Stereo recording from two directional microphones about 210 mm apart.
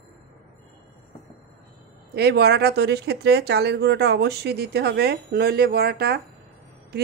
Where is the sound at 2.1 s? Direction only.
50° right (ahead or behind).